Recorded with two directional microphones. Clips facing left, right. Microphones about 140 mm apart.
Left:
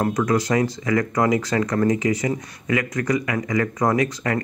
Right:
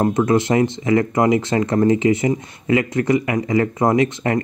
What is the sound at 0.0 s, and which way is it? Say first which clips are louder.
Speech: right 4 dB; 25° right (ahead or behind).